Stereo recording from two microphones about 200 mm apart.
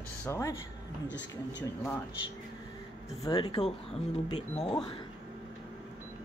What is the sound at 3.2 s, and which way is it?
Speech, 25° left (ahead or behind).